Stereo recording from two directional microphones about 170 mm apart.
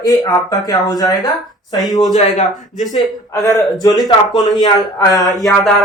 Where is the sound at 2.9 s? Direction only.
20° left (ahead or behind).